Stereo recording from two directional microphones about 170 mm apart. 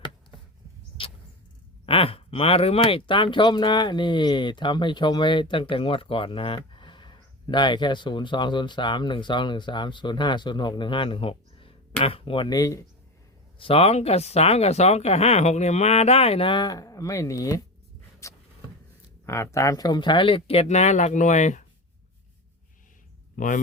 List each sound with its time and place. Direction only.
1.9 s speech: 35° left (ahead or behind)
13.6 s speech: 35° left (ahead or behind); by 17.6 s 20° left (ahead or behind)
18.2 s a sound: 20° left (ahead or behind)
19.2 s speech: 15° left (ahead or behind); by 21.6 s 45° left (ahead or behind)
23.4 s speech: 50° left (ahead or behind)